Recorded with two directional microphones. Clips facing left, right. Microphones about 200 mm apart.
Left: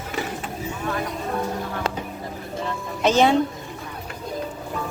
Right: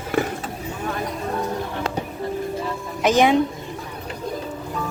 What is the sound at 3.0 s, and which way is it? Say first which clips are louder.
Speech: right 1 dB; 15° right (ahead or behind).